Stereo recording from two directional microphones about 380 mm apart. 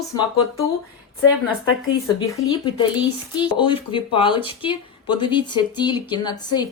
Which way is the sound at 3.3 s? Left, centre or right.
Centre.